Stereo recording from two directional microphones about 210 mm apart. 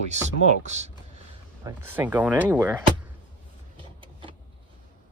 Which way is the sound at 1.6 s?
10° right (ahead or behind).